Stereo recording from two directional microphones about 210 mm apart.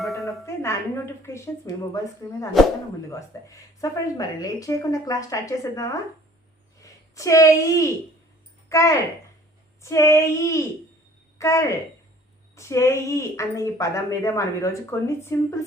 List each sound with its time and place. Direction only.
0.0 s music: centre (ahead or behind)
0.4 s speech: 15° left (ahead or behind)
2.5 s speech: centre (ahead or behind)
3.1 s a woman's voice: 15° left (ahead or behind)